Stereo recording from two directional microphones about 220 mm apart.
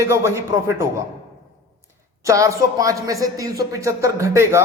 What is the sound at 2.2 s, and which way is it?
A woman's voice, 15° right (ahead or behind).